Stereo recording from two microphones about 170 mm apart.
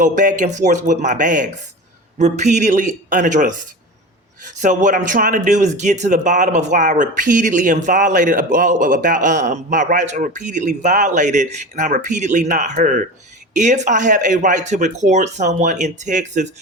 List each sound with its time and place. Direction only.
0.0 s speech: 50° right (ahead or behind)